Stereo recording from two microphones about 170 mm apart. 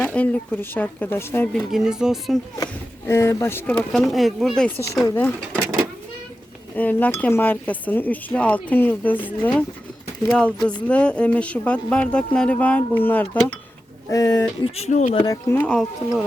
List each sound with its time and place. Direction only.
0.0 s speech: 5° left (ahead or behind)
1.7 s speech: 5° right (ahead or behind)
3.1 s speech: 15° left (ahead or behind)
6.7 s speech: 10° left (ahead or behind)
14.1 s speech: 20° left (ahead or behind)
14.6 s speech: 40° left (ahead or behind)
15.3 s speech: 15° left (ahead or behind)
15.7 s speech: 5° left (ahead or behind)